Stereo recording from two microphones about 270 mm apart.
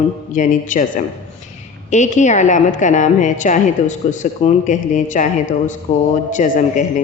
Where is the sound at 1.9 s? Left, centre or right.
Left.